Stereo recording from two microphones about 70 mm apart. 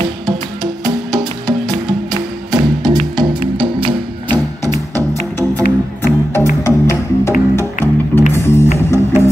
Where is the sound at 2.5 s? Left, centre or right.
Right.